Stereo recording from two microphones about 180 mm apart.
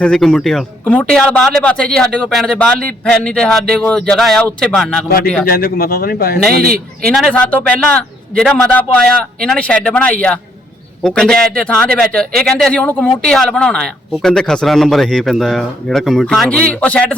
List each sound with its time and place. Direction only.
0.0 s a man's voice: 5° left (ahead or behind)
5.5 s speech: 55° left (ahead or behind)
7.1 s a man's voice: 5° left (ahead or behind)